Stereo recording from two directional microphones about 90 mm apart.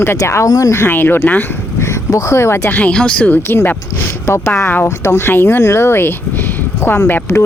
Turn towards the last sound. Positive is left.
turn(degrees=30)  # may be behind; listen again after turning